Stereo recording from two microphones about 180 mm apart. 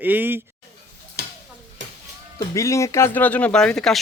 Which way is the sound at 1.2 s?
65° right (ahead or behind).